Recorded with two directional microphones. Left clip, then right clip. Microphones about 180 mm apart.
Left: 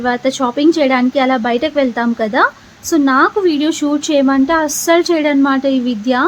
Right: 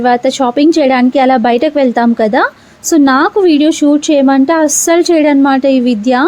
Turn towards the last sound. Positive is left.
turn(degrees=-30)  # may be behind; listen again after turning